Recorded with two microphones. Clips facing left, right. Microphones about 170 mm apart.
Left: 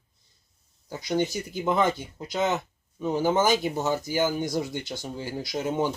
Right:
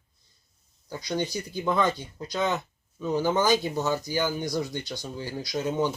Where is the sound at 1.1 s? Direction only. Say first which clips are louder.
Left 3 dB; 20° left (ahead or behind).